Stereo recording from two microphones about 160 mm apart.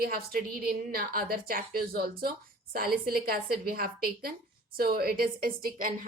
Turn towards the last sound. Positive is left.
turn(degrees=-60)  # may be behind; listen again after turning